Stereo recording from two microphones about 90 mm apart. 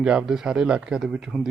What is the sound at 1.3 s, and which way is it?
Speech, 5° left (ahead or behind).